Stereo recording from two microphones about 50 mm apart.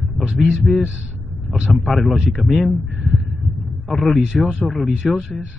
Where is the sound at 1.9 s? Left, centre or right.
Centre.